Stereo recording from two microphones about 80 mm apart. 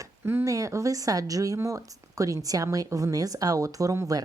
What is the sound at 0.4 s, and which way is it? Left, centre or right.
Speech, right.